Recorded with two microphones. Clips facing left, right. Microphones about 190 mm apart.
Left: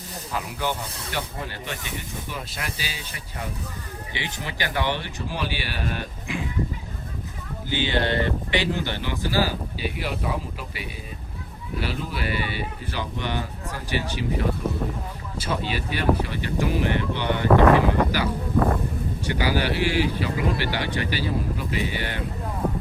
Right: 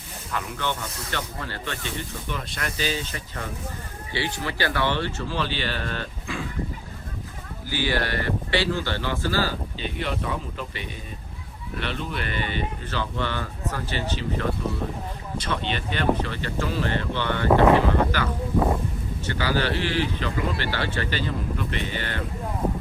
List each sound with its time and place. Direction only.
1.1 s speech: 15° left (ahead or behind)
7.7 s speech: 20° left (ahead or behind)
17.5 s speech: 15° right (ahead or behind)
18.1 s speech: 10° left (ahead or behind)